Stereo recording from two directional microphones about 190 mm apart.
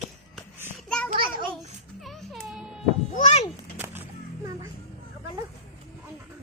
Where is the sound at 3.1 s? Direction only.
35° left (ahead or behind).